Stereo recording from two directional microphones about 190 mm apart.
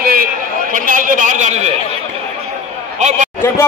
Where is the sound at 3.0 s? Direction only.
35° right (ahead or behind).